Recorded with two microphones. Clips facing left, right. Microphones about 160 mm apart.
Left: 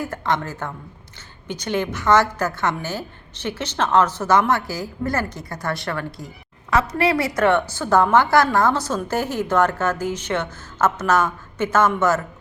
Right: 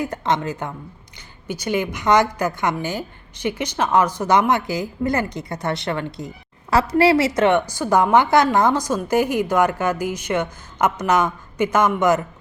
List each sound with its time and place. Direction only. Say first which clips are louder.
0.0 s a woman's voice: right 2 dB; 20° right (ahead or behind)